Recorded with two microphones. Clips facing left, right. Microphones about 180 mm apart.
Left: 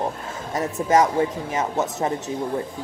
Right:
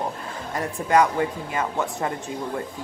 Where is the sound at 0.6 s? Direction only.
20° left (ahead or behind).